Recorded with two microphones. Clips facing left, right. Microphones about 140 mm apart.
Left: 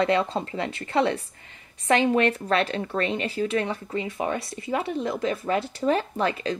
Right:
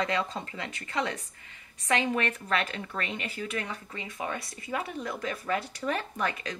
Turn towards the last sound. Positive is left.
turn(degrees=30)  # may be behind; listen again after turning